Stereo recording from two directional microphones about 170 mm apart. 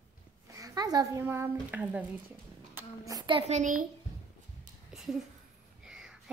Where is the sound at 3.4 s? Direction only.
45° right (ahead or behind).